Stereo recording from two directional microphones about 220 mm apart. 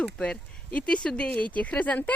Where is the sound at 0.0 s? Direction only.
5° left (ahead or behind).